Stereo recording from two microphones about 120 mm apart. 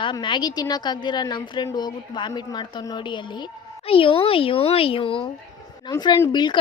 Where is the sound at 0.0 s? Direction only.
40° left (ahead or behind).